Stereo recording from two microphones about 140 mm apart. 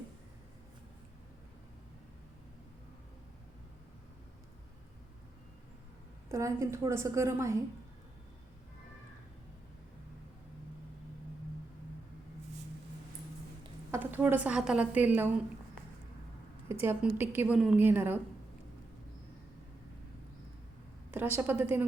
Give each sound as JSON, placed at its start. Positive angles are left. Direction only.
{"t": 6.2, "sound": "a woman's voice", "side_deg": -20}
{"t": 13.9, "sound": "a woman's voice", "side_deg": -15}
{"t": 16.8, "sound": "a woman's voice", "side_deg": -15}
{"t": 21.1, "sound": "a woman's voice", "side_deg": -15}